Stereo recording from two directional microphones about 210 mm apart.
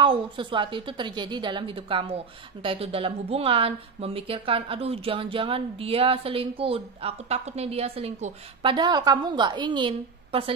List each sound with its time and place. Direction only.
0.0 s a woman's voice: 25° right (ahead or behind)